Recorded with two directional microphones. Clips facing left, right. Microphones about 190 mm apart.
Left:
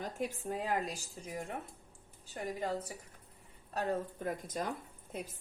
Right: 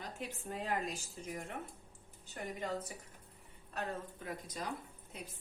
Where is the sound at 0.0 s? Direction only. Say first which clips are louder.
Left 7 dB; 40° left (ahead or behind).